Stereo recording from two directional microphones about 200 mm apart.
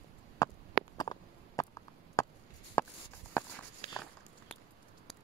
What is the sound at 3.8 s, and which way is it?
Walk, 35° right (ahead or behind).